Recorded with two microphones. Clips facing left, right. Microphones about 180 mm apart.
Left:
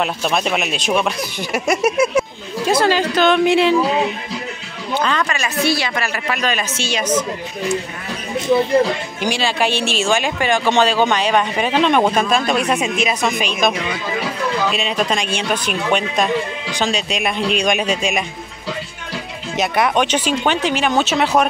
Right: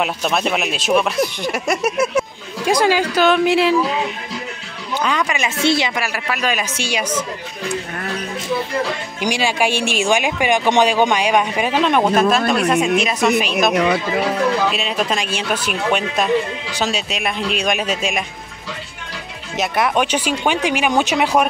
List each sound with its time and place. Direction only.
0.0 s speech: centre (ahead or behind)
2.6 s speech: 15° right (ahead or behind)
5.0 s a woman's voice: 10° right (ahead or behind)
5.9 s speech: 5° right (ahead or behind)
9.2 s speech: 15° right (ahead or behind)
19.5 s speech: centre (ahead or behind)